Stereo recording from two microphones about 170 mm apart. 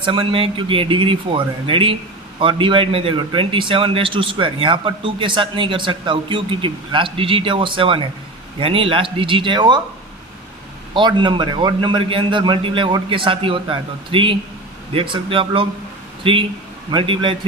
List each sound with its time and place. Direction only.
0.0 s a man's voice: 30° right (ahead or behind)
10.9 s a man's voice: 25° right (ahead or behind)